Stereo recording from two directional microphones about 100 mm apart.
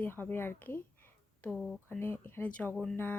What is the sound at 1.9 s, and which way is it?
A woman's voice, 20° left (ahead or behind).